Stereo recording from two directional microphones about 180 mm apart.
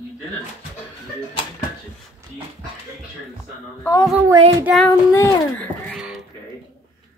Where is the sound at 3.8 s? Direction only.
15° left (ahead or behind).